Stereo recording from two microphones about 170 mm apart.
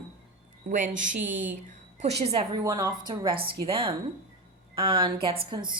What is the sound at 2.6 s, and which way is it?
A woman's voice, 25° right (ahead or behind).